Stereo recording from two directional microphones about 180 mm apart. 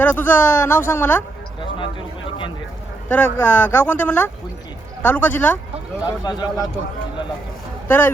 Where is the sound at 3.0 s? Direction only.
10° left (ahead or behind).